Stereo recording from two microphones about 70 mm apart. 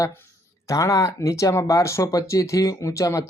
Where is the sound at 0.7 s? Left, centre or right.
Left.